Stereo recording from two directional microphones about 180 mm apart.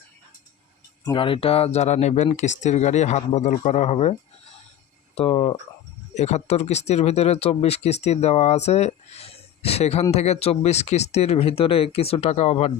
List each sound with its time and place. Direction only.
1.0 s speech: 30° left (ahead or behind)